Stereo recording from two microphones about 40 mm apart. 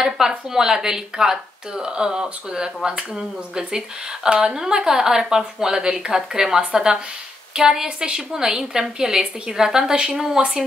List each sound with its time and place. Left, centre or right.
0.5 s a woman's voice: centre